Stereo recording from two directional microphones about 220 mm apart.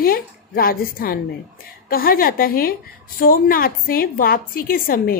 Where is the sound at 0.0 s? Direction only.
40° left (ahead or behind).